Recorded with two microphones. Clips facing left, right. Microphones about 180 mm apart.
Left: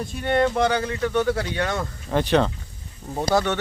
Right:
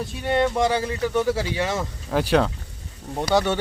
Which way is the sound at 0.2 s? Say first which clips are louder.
Left 1 dB; 5° right (ahead or behind).